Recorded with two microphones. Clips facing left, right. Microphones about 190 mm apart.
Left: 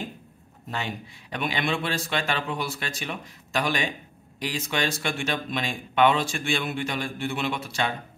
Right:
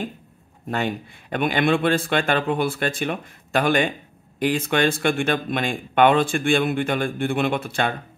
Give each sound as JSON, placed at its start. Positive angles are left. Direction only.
{"t": 0.7, "sound": "speech", "side_deg": -55}